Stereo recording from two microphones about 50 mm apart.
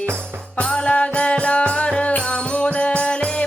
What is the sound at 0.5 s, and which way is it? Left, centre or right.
Music, centre.